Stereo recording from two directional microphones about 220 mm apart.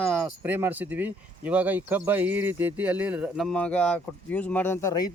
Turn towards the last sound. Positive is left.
turn(degrees=15)  # may be behind; listen again after turning